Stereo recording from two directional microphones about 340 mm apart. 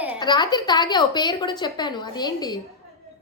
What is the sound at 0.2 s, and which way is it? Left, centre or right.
A woman's voice, centre.